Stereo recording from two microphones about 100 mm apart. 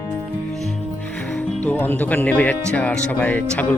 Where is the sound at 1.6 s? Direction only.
20° left (ahead or behind).